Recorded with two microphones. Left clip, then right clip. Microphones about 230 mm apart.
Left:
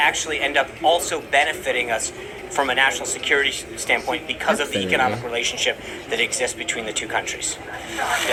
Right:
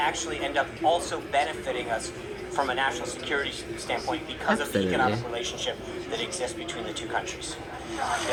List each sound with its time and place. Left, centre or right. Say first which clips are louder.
0.0 s speech: left 8 dB; left